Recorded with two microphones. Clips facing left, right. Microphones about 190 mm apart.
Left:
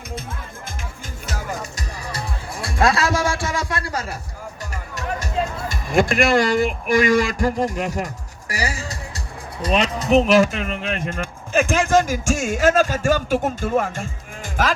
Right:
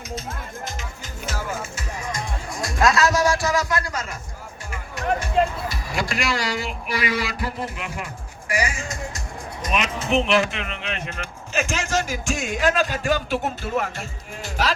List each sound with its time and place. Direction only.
1.7 s music: 35° left (ahead or behind)
4.7 s speech: 40° left (ahead or behind)